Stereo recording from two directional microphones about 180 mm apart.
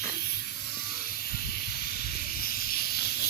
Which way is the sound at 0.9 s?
55° left (ahead or behind).